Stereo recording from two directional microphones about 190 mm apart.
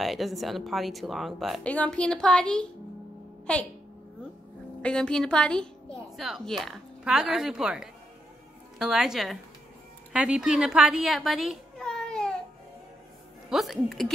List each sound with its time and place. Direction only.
0.0 s a woman's voice: centre (ahead or behind)
4.8 s a woman's voice: 5° left (ahead or behind)
13.5 s a woman's voice: centre (ahead or behind)